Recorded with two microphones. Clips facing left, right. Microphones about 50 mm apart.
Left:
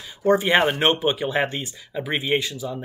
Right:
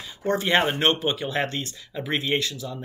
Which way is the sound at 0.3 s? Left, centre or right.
Centre.